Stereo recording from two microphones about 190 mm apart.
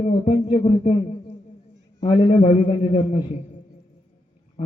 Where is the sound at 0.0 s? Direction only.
40° left (ahead or behind).